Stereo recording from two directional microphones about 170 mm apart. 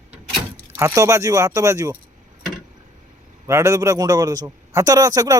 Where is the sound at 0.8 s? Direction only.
15° right (ahead or behind).